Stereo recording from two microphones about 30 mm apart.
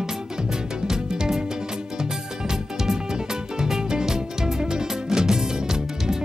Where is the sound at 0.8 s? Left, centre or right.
Right.